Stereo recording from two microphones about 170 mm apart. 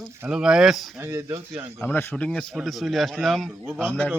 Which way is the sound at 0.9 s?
15° right (ahead or behind).